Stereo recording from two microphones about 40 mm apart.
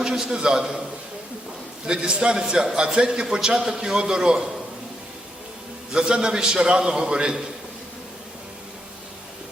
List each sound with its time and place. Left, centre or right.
0.0 s a sound: centre
0.3 s a man's voice: centre
1.9 s a man's voice: right
5.9 s a man's voice: centre